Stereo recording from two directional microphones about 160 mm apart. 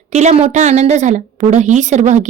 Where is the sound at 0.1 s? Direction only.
45° right (ahead or behind).